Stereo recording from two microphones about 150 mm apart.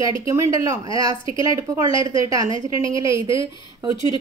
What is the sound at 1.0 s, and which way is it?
A woman's voice, 25° right (ahead or behind).